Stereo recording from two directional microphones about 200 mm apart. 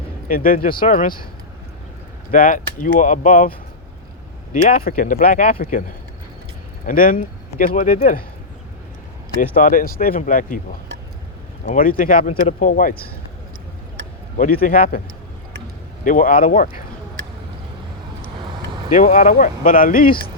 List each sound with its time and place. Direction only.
0.3 s speech: 45° left (ahead or behind)
2.3 s speech: 45° left (ahead or behind)
4.5 s speech: 45° left (ahead or behind)
6.8 s speech: 45° left (ahead or behind)
9.4 s speech: 45° left (ahead or behind)
11.6 s speech: 45° left (ahead or behind)
14.3 s speech: 45° left (ahead or behind)
16.0 s speech: 40° left (ahead or behind)
18.9 s speech: 40° left (ahead or behind)